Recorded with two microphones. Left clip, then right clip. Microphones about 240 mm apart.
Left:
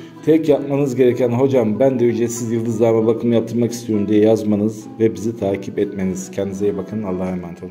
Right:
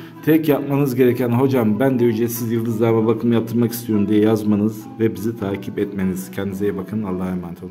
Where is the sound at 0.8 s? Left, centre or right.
Right.